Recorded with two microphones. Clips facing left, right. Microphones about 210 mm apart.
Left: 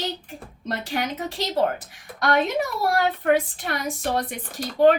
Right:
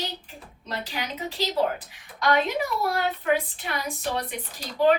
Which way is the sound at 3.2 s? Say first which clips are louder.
Left 4 dB; 50° left (ahead or behind).